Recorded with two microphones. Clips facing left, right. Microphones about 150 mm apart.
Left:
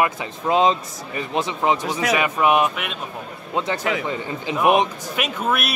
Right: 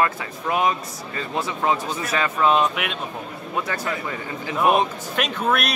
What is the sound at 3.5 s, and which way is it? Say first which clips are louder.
Speech: left 4 dB; 20° left (ahead or behind).